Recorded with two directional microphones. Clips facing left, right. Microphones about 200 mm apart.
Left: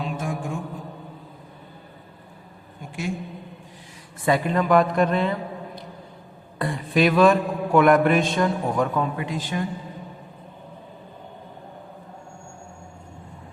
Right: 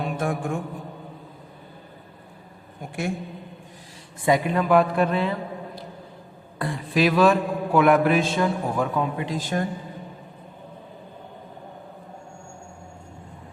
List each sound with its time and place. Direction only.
0.0 s mantra: 60° right (ahead or behind)
4.3 s a man's voice: 10° right (ahead or behind)
6.6 s a man's voice: centre (ahead or behind)
9.1 s speech: 35° right (ahead or behind)